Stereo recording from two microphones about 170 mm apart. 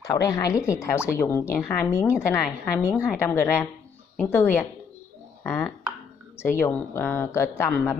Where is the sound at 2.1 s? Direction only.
5° right (ahead or behind).